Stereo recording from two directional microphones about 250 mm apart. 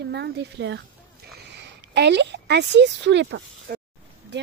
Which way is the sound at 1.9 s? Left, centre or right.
Right.